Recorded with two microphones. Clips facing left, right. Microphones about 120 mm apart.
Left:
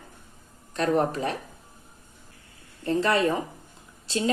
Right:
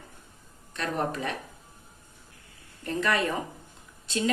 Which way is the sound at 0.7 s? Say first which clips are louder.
Left 6 dB; 40° left (ahead or behind).